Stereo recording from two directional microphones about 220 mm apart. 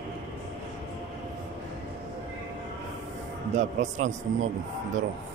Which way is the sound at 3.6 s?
35° right (ahead or behind).